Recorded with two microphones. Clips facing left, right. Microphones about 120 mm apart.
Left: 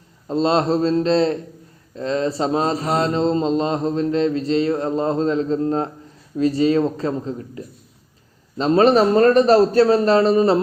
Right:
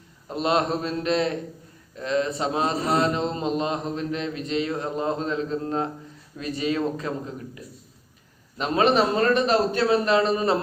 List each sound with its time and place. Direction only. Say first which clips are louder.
0.3 s a man's voice: left 5 dB; 30° left (ahead or behind)
2.0 s mantra: left 4 dB; 30° left (ahead or behind)